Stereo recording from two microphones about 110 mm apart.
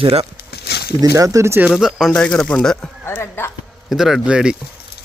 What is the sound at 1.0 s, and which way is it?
Speech, 30° right (ahead or behind).